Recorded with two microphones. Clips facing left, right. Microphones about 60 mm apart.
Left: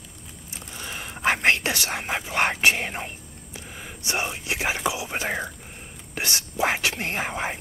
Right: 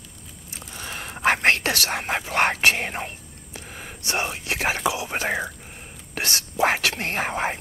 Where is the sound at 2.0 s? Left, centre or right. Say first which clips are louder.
Right 2 dB; centre.